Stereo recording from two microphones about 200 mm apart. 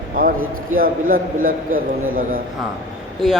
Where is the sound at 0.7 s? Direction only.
45° right (ahead or behind).